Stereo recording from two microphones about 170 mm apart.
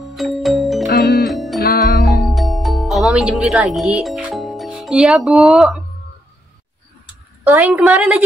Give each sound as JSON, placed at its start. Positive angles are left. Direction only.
{"t": 0.0, "sound": "music", "side_deg": 0}
{"t": 1.6, "sound": "music", "side_deg": 60}
{"t": 2.2, "sound": "music", "side_deg": 0}
{"t": 7.4, "sound": "a woman's voice", "side_deg": -10}